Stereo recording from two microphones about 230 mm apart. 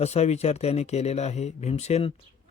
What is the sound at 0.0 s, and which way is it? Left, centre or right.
Speech, left.